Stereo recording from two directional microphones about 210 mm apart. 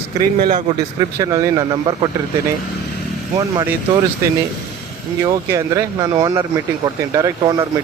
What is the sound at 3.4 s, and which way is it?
Speech, 20° right (ahead or behind).